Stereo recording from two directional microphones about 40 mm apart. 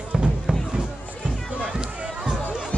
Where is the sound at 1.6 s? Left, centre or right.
Right.